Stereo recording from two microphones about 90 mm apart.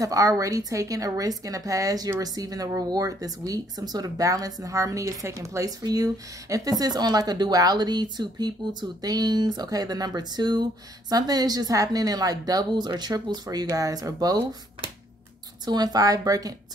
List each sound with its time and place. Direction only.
0.0 s a woman's voice: 40° right (ahead or behind)
15.6 s a woman's voice: 50° right (ahead or behind)